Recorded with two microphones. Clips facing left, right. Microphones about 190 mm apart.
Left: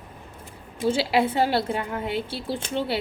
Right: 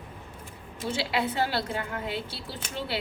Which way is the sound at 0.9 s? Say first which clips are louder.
Left 6 dB; 25° left (ahead or behind).